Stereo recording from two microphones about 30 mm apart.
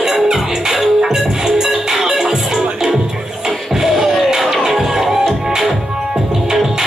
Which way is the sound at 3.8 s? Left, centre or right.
Centre.